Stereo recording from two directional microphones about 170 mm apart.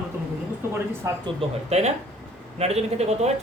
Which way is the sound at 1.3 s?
40° right (ahead or behind).